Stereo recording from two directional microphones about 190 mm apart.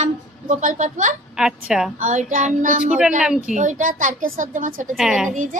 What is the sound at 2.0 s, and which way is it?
Speech, 40° right (ahead or behind).